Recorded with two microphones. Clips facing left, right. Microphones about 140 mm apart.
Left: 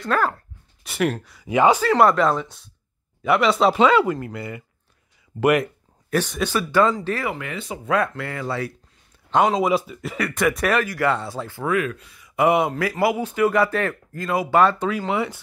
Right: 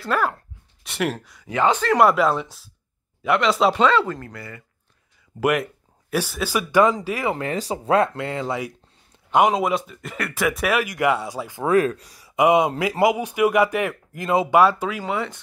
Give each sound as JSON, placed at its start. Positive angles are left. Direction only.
{"t": 0.0, "sound": "speech", "side_deg": -5}
{"t": 1.5, "sound": "speech", "side_deg": 10}
{"t": 2.0, "sound": "speech", "side_deg": -5}
{"t": 3.8, "sound": "speech", "side_deg": 10}
{"t": 5.4, "sound": "speech", "side_deg": 0}
{"t": 7.2, "sound": "speech", "side_deg": -35}
{"t": 10.9, "sound": "speech", "side_deg": -15}
{"t": 11.6, "sound": "speech", "side_deg": -35}
{"t": 12.4, "sound": "speech", "side_deg": -15}
{"t": 14.5, "sound": "speech", "side_deg": -10}